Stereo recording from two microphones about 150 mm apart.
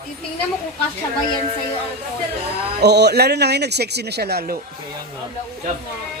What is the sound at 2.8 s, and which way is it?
Speech, 90° right.